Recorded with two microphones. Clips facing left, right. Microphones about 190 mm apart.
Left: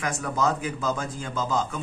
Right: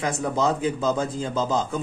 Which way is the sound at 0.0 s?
25° right (ahead or behind).